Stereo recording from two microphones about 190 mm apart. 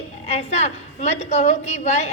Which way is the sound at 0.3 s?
35° left (ahead or behind).